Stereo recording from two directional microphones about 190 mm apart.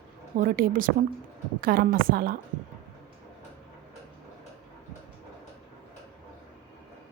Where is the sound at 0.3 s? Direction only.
50° right (ahead or behind).